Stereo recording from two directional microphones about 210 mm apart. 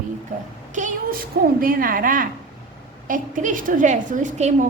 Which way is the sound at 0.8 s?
35° right (ahead or behind).